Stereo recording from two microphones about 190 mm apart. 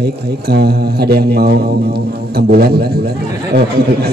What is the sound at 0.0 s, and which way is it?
A man's voice, 55° right (ahead or behind).